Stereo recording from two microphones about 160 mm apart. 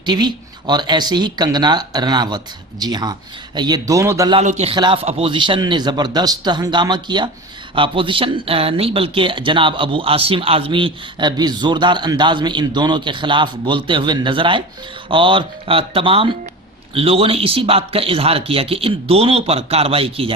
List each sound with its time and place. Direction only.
0.0 s speech: 25° right (ahead or behind)
4.4 s speech: 40° right (ahead or behind)